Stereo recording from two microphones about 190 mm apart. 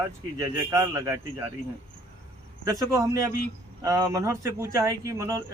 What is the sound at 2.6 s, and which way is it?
Speech, 15° right (ahead or behind).